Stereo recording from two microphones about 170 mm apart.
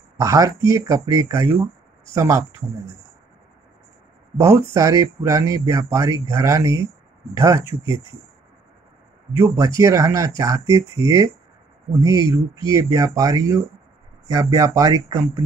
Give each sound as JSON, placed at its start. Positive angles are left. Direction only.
{"t": 0.2, "sound": "speech", "side_deg": -20}
{"t": 4.4, "sound": "speech", "side_deg": -15}
{"t": 9.4, "sound": "speech", "side_deg": -15}